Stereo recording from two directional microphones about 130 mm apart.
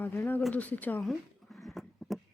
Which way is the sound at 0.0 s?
15° left (ahead or behind).